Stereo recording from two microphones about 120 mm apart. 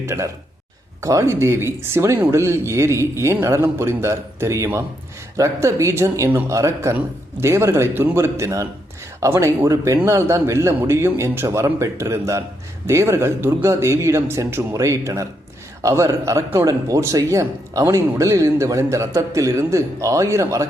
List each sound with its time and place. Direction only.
0.0 s speech: 20° right (ahead or behind)